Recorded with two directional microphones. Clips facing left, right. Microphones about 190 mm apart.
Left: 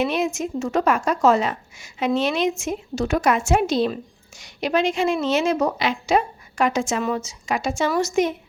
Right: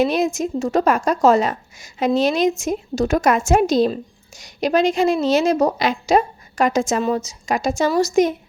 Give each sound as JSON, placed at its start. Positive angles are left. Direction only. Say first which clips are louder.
{"t": 0.0, "sound": "a woman's voice", "louder": "right 4 dB", "side_deg": -40}